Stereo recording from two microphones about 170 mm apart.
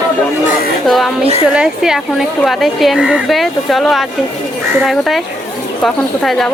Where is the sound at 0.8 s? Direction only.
Centre (ahead or behind).